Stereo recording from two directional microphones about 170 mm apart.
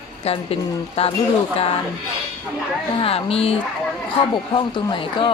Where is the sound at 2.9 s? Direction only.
35° left (ahead or behind).